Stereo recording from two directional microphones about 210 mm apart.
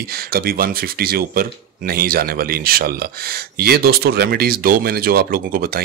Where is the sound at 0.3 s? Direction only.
45° right (ahead or behind).